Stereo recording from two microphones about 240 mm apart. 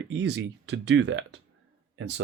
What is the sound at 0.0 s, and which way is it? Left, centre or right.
Speech, right.